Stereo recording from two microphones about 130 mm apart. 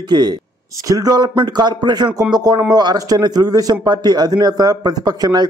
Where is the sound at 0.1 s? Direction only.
35° right (ahead or behind).